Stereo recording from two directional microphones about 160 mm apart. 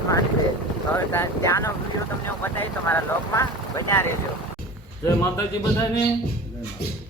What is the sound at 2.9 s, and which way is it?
Speech, 20° left (ahead or behind).